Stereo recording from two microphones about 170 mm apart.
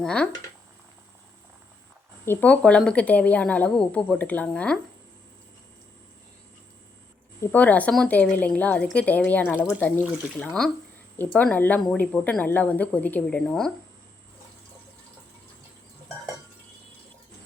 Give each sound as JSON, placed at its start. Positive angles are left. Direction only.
{"t": 0.0, "sound": "speech", "side_deg": 5}
{"t": 2.2, "sound": "speech", "side_deg": 10}
{"t": 7.4, "sound": "speech", "side_deg": 10}